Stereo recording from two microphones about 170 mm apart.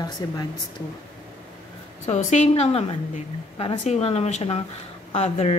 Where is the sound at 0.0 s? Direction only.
25° left (ahead or behind).